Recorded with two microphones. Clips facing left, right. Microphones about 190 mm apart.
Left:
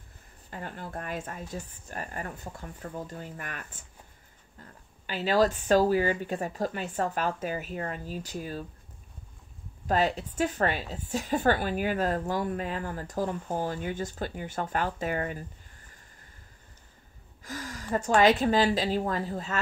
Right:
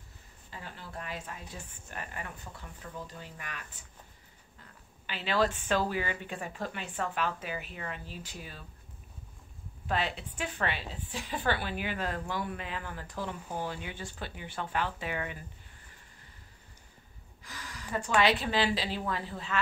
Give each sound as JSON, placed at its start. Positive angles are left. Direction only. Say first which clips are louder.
{"t": 0.5, "sound": "a woman's voice", "louder": "left 7 dB", "side_deg": 50}
{"t": 5.0, "sound": "speech", "louder": "left 5 dB", "side_deg": 40}
{"t": 9.8, "sound": "a woman's voice", "louder": "left 6 dB", "side_deg": 40}
{"t": 17.4, "sound": "speech", "louder": "left 8 dB", "side_deg": 45}